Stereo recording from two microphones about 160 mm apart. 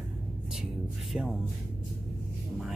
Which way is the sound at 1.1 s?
Centre (ahead or behind).